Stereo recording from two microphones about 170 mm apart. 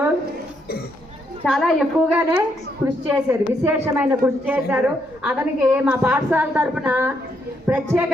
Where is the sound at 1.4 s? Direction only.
Centre (ahead or behind).